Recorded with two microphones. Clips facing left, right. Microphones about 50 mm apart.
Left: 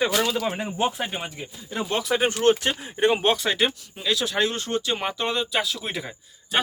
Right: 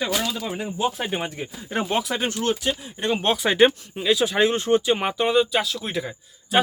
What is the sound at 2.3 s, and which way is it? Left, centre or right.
Speech, left.